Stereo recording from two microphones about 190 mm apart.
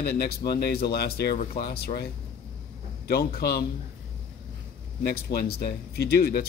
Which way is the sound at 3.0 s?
55° left (ahead or behind).